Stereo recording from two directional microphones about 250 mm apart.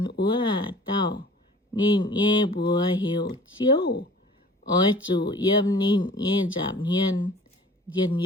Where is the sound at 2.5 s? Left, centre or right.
Centre.